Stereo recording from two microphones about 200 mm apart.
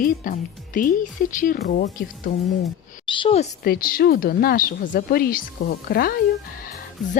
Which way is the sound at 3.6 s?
50° left (ahead or behind).